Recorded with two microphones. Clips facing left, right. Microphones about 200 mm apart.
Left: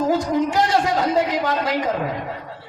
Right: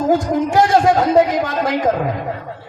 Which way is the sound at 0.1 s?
50° right (ahead or behind).